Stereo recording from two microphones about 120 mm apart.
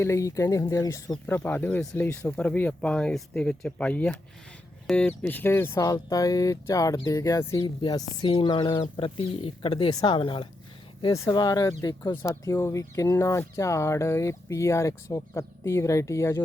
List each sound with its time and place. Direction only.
0.0 s speech: 25° left (ahead or behind)
7.6 s speech: 40° left (ahead or behind)
11.1 s speech: 30° left (ahead or behind)
12.2 s speech: 25° left (ahead or behind)